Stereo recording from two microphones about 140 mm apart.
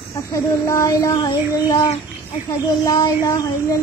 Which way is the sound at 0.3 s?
25° left (ahead or behind).